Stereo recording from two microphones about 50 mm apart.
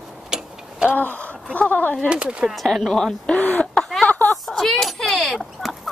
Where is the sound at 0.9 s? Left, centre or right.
Left.